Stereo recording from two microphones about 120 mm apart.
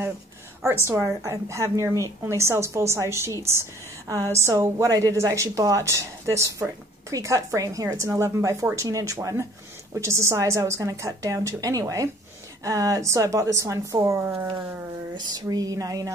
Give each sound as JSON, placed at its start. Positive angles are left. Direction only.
{"t": 0.8, "sound": "a woman's voice", "side_deg": -25}